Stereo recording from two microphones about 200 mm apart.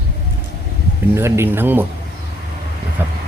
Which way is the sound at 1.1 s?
10° right (ahead or behind).